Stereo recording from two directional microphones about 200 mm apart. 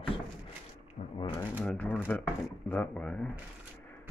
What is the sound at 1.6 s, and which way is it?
Speech, 5° left (ahead or behind).